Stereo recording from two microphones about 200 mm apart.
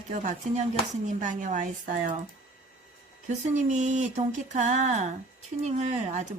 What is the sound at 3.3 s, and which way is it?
Speech, 40° right (ahead or behind).